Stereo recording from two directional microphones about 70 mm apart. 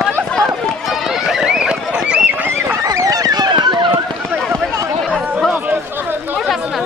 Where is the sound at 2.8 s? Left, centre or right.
Right.